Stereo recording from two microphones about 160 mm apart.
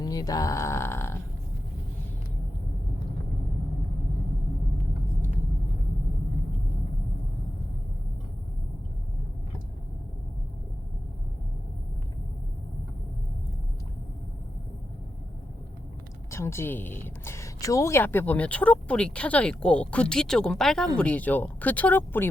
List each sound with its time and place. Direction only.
0.0 s speech: 25° left (ahead or behind)
16.3 s a woman's voice: 15° left (ahead or behind)